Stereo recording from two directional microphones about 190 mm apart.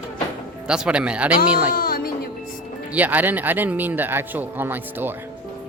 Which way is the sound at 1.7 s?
50° left (ahead or behind).